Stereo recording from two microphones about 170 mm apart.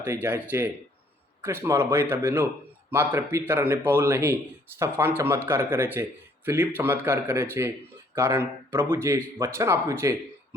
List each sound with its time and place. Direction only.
0.0 s speech: 15° right (ahead or behind)